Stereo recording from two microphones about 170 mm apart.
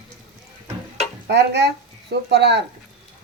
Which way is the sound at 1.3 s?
80° right.